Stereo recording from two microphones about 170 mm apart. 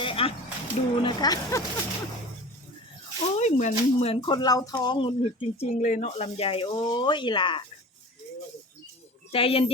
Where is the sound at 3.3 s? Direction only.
45° left (ahead or behind); by 5.1 s 25° left (ahead or behind).